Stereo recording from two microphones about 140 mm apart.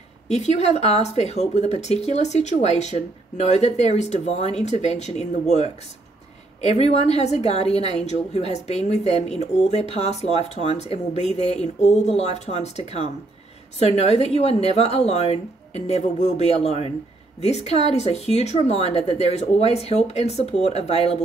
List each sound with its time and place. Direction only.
0.3 s a woman's voice: 50° left (ahead or behind)